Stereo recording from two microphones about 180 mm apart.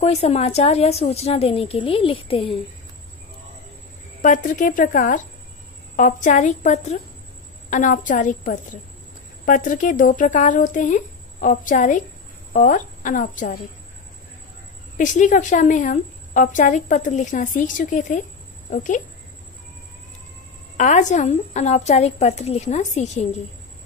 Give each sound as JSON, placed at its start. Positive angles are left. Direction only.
{"t": 0.0, "sound": "a woman's voice", "side_deg": 35}
{"t": 4.2, "sound": "a woman's voice", "side_deg": 45}
{"t": 15.0, "sound": "a woman's voice", "side_deg": 45}
{"t": 20.7, "sound": "a woman's voice", "side_deg": 45}